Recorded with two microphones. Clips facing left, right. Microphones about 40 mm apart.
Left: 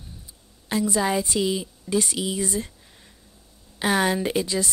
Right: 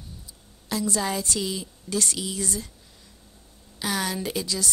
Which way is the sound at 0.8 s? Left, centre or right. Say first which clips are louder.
Left 4 dB; centre.